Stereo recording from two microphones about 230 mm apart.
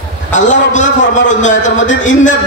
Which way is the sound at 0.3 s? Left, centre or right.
Left.